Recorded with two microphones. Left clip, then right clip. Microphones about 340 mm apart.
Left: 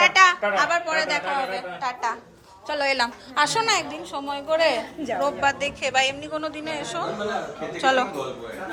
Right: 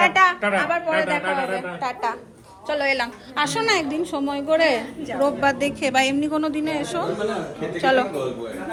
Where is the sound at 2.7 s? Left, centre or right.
Centre.